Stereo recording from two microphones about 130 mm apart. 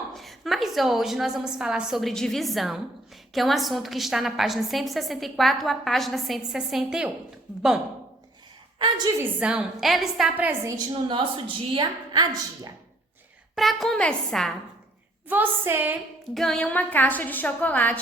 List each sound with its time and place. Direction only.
0.2 s a woman's voice: centre (ahead or behind)
9.1 s a woman's voice: 10° right (ahead or behind)
10.7 s a woman's voice: 35° right (ahead or behind)
13.6 s a woman's voice: centre (ahead or behind)
15.3 s a woman's voice: 15° right (ahead or behind)
16.3 s a woman's voice: 5° left (ahead or behind)